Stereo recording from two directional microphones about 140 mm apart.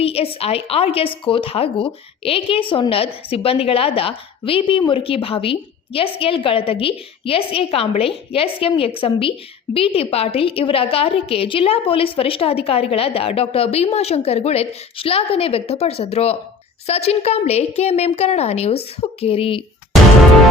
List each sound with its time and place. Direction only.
0.0 s a woman's voice: 45° left (ahead or behind)